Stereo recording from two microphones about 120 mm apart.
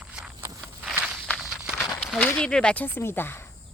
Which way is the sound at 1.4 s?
5° right (ahead or behind).